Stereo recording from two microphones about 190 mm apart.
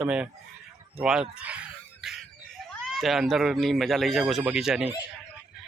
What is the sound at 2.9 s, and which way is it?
A man's voice, centre (ahead or behind).